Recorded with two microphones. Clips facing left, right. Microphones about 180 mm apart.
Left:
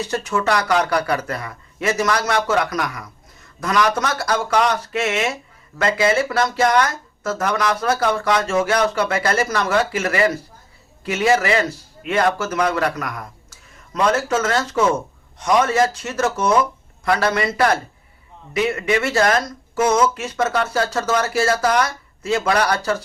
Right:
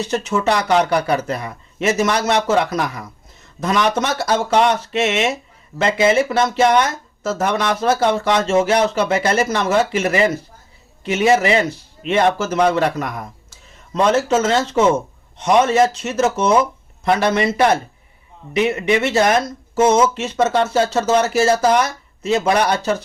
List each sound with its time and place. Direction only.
0.0 s speech: 20° right (ahead or behind)